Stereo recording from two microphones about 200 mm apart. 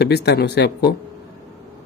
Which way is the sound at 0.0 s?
55° left (ahead or behind).